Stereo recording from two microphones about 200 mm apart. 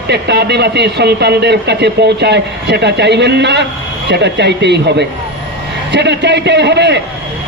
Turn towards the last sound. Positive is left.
turn(degrees=-60)  # may be behind; listen again after turning